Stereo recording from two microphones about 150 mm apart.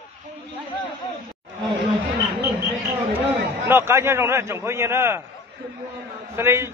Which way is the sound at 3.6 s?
15° right (ahead or behind).